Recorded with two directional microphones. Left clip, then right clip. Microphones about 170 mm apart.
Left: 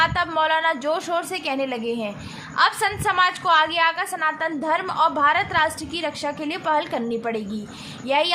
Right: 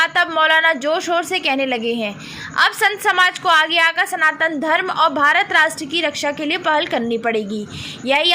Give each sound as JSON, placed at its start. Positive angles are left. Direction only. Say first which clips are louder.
{"t": 0.0, "sound": "a woman's voice", "louder": "right 5 dB", "side_deg": -15}